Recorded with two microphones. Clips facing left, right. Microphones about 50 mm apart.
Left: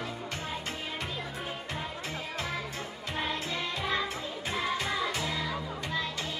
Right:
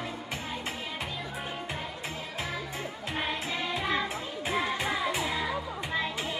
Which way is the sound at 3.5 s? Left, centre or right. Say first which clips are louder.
Right 3 dB; centre.